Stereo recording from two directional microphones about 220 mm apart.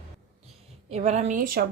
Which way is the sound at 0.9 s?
30° right (ahead or behind).